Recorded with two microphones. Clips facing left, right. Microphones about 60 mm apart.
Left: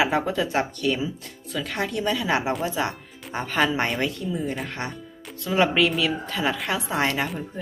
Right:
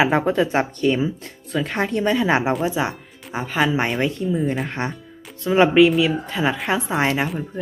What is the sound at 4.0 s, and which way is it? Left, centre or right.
Speech, right.